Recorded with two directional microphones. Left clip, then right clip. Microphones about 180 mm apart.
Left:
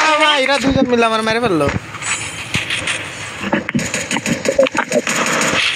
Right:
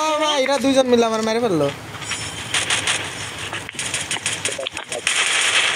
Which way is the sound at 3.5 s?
Centre (ahead or behind).